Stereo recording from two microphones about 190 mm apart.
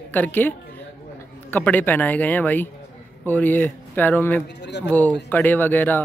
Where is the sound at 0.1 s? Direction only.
10° left (ahead or behind).